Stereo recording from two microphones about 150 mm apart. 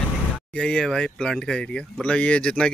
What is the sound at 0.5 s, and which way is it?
Speech, 5° left (ahead or behind).